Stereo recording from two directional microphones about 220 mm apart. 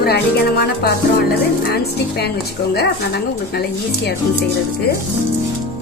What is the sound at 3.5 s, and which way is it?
Speech, 45° left (ahead or behind).